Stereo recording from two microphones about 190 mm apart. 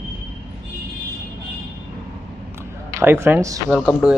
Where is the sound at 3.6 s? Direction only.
Centre (ahead or behind).